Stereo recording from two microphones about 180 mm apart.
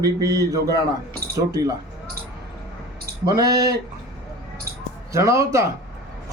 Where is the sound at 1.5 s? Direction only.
20° right (ahead or behind).